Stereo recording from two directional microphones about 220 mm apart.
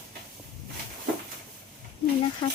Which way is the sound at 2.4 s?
25° left (ahead or behind).